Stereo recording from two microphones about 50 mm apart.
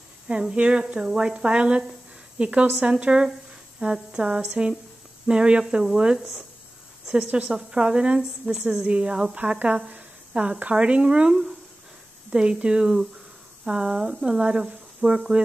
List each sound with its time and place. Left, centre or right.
0.3 s a woman's voice: right
6.1 s speech: centre
7.3 s a woman's voice: right